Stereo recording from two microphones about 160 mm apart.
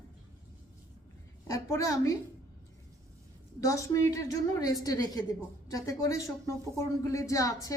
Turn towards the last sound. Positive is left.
turn(degrees=20)  # may be behind; listen again after turning